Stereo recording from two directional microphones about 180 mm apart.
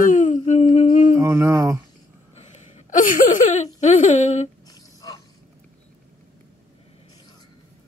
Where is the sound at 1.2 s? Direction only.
15° right (ahead or behind).